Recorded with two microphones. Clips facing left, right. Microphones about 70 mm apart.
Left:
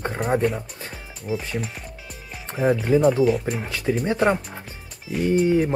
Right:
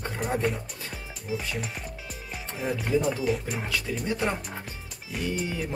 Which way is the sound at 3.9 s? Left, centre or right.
Left.